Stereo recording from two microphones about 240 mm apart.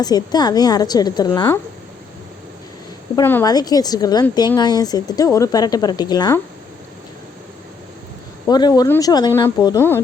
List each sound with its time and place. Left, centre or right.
0.0 s a woman's voice: centre
3.2 s a woman's voice: centre
8.4 s a woman's voice: centre